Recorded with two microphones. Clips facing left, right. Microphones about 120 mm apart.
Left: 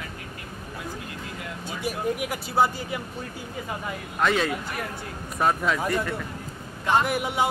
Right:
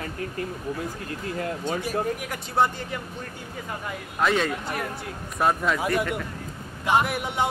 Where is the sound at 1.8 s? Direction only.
10° left (ahead or behind).